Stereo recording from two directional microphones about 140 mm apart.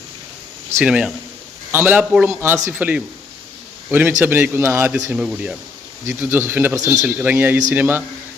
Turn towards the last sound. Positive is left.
turn(degrees=-15)  # may be behind; listen again after turning